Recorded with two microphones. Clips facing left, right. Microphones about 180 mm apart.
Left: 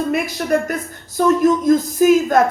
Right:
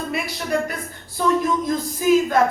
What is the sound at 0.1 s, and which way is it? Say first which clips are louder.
A woman's voice: left 6 dB; 45° left (ahead or behind).